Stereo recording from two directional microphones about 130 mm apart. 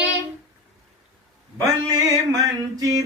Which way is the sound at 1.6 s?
25° right (ahead or behind).